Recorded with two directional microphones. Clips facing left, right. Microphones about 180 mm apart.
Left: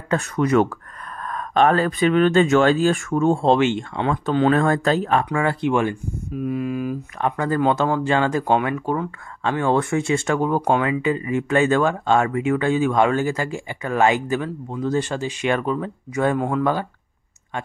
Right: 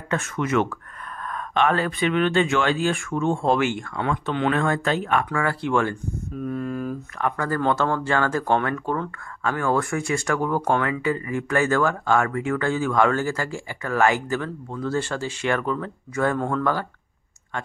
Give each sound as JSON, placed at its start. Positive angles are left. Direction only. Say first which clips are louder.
{"t": 0.1, "sound": "speech", "louder": "left 5 dB", "side_deg": 35}
{"t": 3.4, "sound": "speech", "louder": "left 4 dB", "side_deg": 25}
{"t": 7.2, "sound": "speech", "louder": "left 4 dB", "side_deg": 20}
{"t": 9.4, "sound": "speech", "louder": "left 3 dB", "side_deg": 25}